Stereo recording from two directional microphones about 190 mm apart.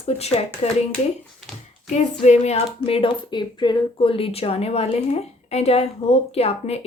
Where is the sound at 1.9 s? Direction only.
35° left (ahead or behind).